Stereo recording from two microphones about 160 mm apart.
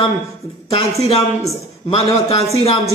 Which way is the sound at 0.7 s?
40° left (ahead or behind).